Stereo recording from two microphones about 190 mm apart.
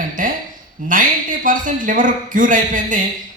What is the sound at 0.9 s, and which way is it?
Speech, 45° right (ahead or behind).